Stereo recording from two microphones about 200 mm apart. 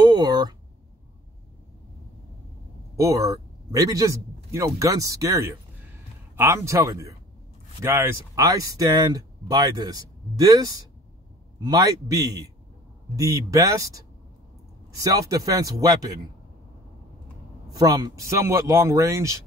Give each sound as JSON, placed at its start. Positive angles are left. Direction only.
{"t": 0.0, "sound": "a sound", "side_deg": -20}
{"t": 3.0, "sound": "a man's voice", "side_deg": -15}
{"t": 17.7, "sound": "a man's voice", "side_deg": -20}